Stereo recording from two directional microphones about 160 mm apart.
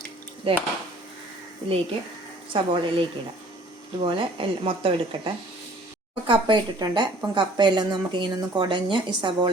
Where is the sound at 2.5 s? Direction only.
35° right (ahead or behind).